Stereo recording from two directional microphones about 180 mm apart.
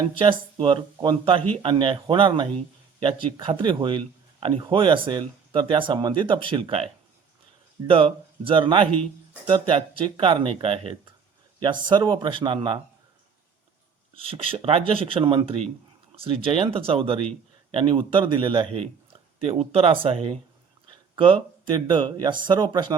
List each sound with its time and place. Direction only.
0.2 s a man's voice: 30° right (ahead or behind)
14.2 s speech: 30° right (ahead or behind)
21.2 s a man's voice: 30° right (ahead or behind)